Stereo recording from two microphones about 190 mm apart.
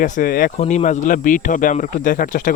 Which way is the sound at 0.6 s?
35° left (ahead or behind).